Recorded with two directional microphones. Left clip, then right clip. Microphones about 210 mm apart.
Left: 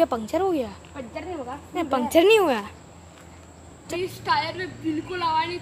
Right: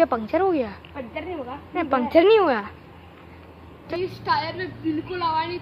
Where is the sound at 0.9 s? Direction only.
15° left (ahead or behind).